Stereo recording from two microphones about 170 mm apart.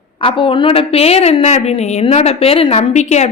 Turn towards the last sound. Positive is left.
turn(degrees=40)  # may be behind; listen again after turning